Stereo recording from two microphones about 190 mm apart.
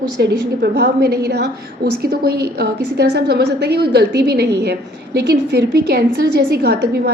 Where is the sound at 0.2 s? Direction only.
55° right (ahead or behind).